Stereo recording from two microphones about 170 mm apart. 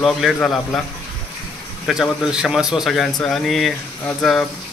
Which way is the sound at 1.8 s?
Centre (ahead or behind).